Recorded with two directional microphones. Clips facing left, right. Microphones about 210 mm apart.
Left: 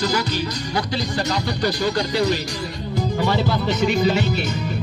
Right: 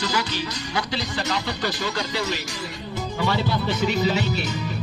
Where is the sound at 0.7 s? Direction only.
40° left (ahead or behind).